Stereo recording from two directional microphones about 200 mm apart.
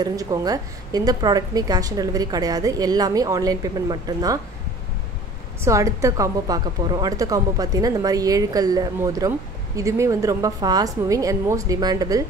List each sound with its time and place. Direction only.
0.0 s a woman's voice: 20° right (ahead or behind)
5.6 s a woman's voice: 15° right (ahead or behind)